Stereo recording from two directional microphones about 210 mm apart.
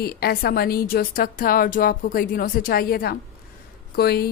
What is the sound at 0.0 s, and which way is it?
A woman's voice, 45° left (ahead or behind).